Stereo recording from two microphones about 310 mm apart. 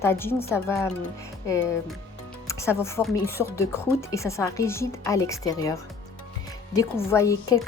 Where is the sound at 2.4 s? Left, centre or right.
Centre.